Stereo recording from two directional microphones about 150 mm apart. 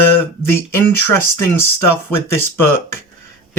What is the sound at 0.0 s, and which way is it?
Speech, 15° left (ahead or behind).